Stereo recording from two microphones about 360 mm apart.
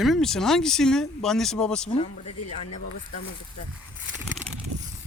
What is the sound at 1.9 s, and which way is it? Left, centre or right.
Speech, centre.